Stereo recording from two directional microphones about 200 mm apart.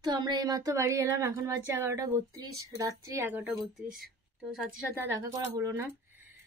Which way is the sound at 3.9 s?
Centre (ahead or behind).